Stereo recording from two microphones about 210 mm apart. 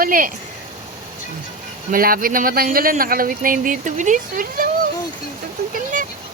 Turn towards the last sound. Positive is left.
turn(degrees=-40)  # may be behind; listen again after turning